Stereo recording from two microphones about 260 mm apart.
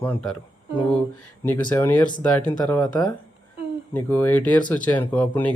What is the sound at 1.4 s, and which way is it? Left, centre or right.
Speech, centre.